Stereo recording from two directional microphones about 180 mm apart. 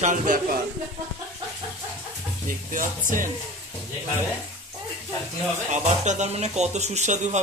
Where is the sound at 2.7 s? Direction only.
50° right (ahead or behind).